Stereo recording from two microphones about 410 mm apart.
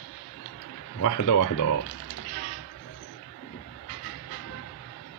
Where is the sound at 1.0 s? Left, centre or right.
Left.